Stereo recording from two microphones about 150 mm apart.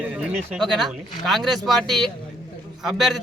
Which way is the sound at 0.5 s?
Centre (ahead or behind).